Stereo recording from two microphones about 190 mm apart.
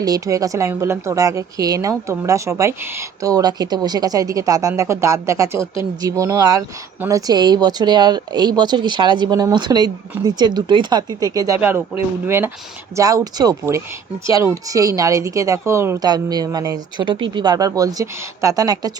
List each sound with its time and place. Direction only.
0.0 s a woman's voice: 20° right (ahead or behind)